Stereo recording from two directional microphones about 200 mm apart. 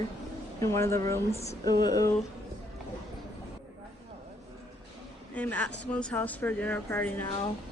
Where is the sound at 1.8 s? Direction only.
20° left (ahead or behind).